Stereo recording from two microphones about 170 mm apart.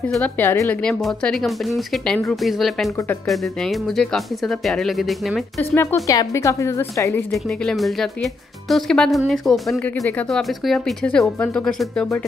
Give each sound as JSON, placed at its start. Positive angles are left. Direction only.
{"t": 0.1, "sound": "speech", "side_deg": 10}
{"t": 5.6, "sound": "a woman's voice", "side_deg": 15}
{"t": 7.2, "sound": "speech", "side_deg": 5}